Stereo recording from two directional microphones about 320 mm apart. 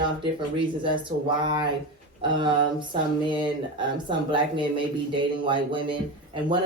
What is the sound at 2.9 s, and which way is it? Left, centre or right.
Speech, centre.